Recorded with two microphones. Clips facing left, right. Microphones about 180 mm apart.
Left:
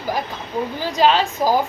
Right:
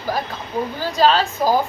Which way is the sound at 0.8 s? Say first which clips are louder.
Even; 15° left (ahead or behind).